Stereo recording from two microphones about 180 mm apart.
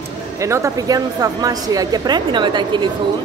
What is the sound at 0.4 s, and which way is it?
A woman's voice, 15° right (ahead or behind).